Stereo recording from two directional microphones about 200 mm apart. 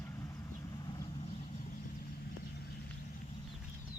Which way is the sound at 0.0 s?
15° left (ahead or behind).